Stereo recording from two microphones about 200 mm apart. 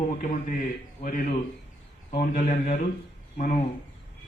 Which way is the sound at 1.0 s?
40° left (ahead or behind).